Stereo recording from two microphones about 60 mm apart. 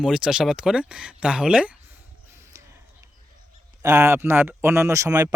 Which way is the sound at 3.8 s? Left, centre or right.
Right.